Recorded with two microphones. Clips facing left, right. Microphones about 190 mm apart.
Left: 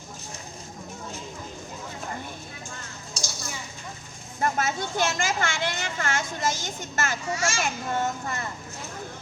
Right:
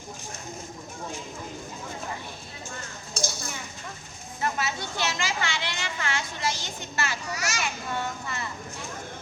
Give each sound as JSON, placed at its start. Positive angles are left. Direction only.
{"t": 3.2, "sound": "a sound", "side_deg": -55}
{"t": 4.4, "sound": "a woman's voice", "side_deg": 45}
{"t": 7.3, "sound": "a child's voice", "side_deg": 25}
{"t": 7.6, "sound": "a woman's voice", "side_deg": 45}